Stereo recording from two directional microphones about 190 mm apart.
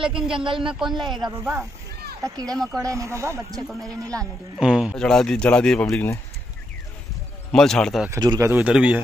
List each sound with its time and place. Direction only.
0.1 s speech: 5° right (ahead or behind)
0.5 s speech: 25° right (ahead or behind)
1.4 s speech: 15° right (ahead or behind)
4.6 s speech: 5° right (ahead or behind); by 6.1 s 10° left (ahead or behind)
7.5 s speech: centre (ahead or behind)
8.1 s speech: 20° right (ahead or behind)